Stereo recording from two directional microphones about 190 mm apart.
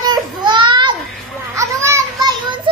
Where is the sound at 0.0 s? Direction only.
25° right (ahead or behind).